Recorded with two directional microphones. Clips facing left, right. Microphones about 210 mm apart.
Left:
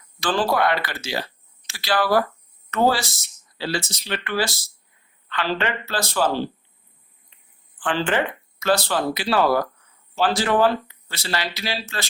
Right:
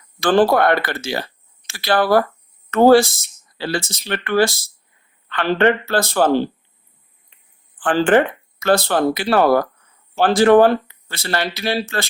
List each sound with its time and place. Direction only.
0.2 s speech: 55° right (ahead or behind)
7.9 s speech: 50° right (ahead or behind)